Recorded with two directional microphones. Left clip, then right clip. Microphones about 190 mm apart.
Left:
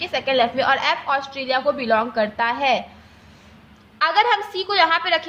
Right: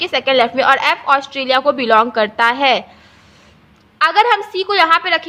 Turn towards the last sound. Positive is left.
turn(degrees=-30)  # may be behind; listen again after turning